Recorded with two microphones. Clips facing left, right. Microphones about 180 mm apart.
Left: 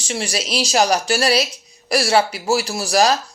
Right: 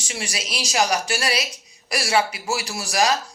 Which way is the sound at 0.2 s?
30° left (ahead or behind).